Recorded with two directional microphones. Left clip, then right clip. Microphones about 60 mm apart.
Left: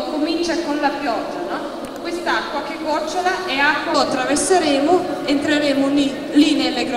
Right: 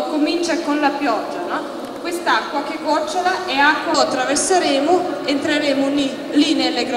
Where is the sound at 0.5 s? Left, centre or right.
Right.